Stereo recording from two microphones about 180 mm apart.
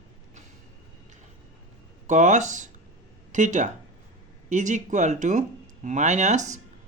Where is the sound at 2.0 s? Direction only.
40° right (ahead or behind).